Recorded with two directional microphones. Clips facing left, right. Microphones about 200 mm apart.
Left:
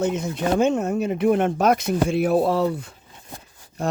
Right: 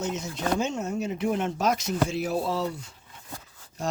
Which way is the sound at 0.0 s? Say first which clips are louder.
Left 7 dB; 55° left (ahead or behind).